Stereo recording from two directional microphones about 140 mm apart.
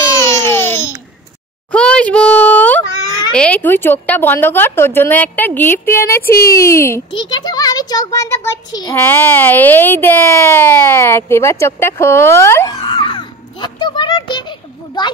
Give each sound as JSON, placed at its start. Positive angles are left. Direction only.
{"t": 0.0, "sound": "baby cry", "side_deg": 20}
{"t": 1.7, "sound": "a sound", "side_deg": 5}
{"t": 3.3, "sound": "a woman's voice", "side_deg": 10}
{"t": 6.3, "sound": "speech", "side_deg": 90}
{"t": 6.6, "sound": "a child's voice", "side_deg": 20}
{"t": 7.2, "sound": "a child's voice", "side_deg": 35}